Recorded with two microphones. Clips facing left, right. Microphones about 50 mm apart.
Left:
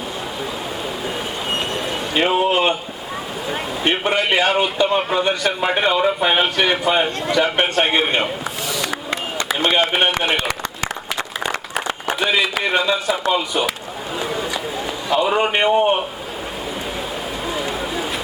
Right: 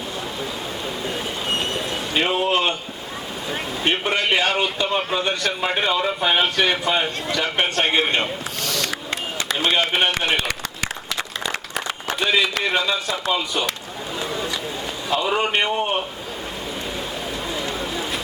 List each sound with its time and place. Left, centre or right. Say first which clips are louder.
1.0 s train: even; centre
3.5 s a man's voice: left 2 dB; centre
11.4 s applause: left 5 dB; left
12.2 s a man's voice: left 1 dB; centre
14.2 s a sound: left 3 dB; centre
15.1 s a man's voice: left 3 dB; centre
17.5 s vehicle: left 4 dB; centre